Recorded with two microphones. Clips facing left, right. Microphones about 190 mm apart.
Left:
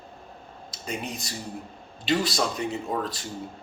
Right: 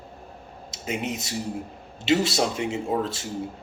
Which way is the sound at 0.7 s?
20° right (ahead or behind).